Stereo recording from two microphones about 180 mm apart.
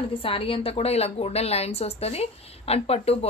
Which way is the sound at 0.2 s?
30° left (ahead or behind).